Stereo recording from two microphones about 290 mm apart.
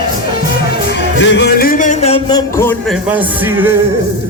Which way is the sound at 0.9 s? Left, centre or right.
Left.